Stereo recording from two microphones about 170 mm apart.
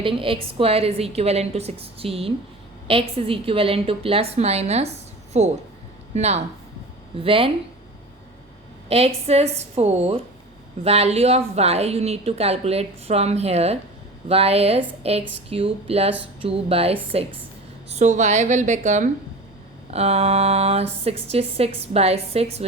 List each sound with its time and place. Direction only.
0.0 s a woman's voice: 30° right (ahead or behind)
8.9 s a woman's voice: 35° right (ahead or behind)